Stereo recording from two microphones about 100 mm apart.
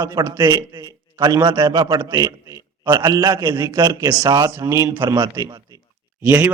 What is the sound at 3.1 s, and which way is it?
A man's voice, 30° right (ahead or behind).